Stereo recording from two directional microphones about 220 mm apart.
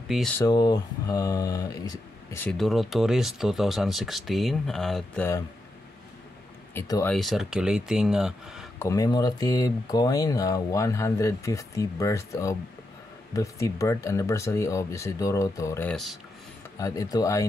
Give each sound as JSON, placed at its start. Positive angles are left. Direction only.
{"t": 0.4, "sound": "speech", "side_deg": 20}
{"t": 6.7, "sound": "speech", "side_deg": 10}
{"t": 7.2, "sound": "speech", "side_deg": 0}
{"t": 8.7, "sound": "speech", "side_deg": 15}
{"t": 16.7, "sound": "speech", "side_deg": 15}